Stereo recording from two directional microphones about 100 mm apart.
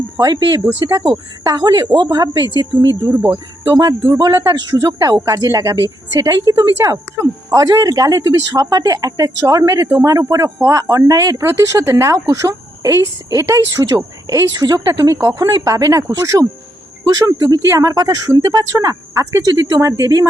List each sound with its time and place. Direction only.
0.2 s speech: 40° right (ahead or behind)
3.0 s speech: 20° right (ahead or behind)
3.3 s speech: 45° right (ahead or behind)